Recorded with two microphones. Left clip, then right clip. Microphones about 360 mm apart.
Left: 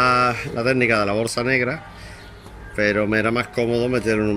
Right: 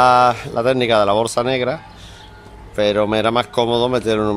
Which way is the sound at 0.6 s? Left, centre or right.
Right.